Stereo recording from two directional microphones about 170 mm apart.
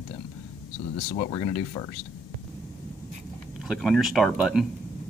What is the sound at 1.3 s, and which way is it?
Speech, 25° left (ahead or behind).